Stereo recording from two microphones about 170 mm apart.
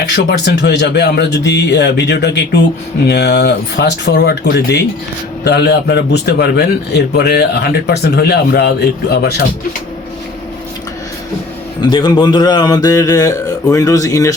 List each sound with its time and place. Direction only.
0.1 s a man's voice: 85° left
11.8 s speech: 30° left (ahead or behind)